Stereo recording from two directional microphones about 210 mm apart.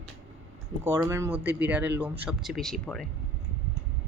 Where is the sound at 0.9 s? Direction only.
15° right (ahead or behind); by 3.1 s 5° left (ahead or behind).